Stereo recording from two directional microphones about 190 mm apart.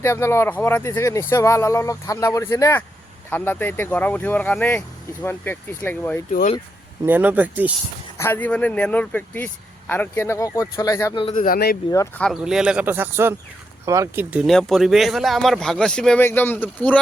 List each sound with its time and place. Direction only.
0.0 s speech: 15° left (ahead or behind)
7.0 s speech: 10° right (ahead or behind)
8.2 s speech: 10° left (ahead or behind)
11.3 s speech: 50° left (ahead or behind)
11.9 s speech: 15° left (ahead or behind)
12.2 s speech: centre (ahead or behind)